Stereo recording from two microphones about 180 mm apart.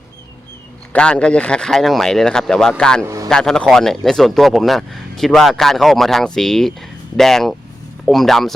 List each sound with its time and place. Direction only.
0.9 s speech: 5° left (ahead or behind)
3.0 s a man's voice: 15° right (ahead or behind)
3.2 s speech: 5° left (ahead or behind)